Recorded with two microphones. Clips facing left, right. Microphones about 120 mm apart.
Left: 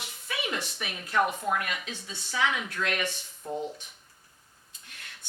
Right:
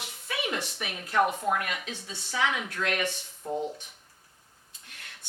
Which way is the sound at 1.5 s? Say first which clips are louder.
Even; 50° right (ahead or behind).